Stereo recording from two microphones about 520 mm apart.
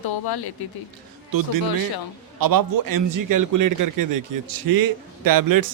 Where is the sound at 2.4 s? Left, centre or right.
Right.